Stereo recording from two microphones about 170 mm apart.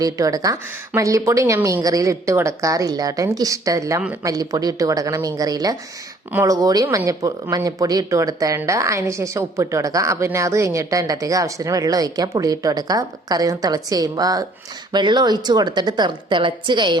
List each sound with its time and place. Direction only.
0.0 s speech: 20° right (ahead or behind)